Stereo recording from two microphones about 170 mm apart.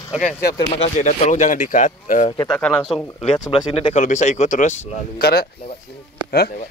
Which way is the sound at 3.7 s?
35° left (ahead or behind).